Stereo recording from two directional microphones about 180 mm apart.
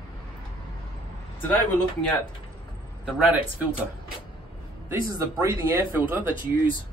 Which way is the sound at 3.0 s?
5° right (ahead or behind).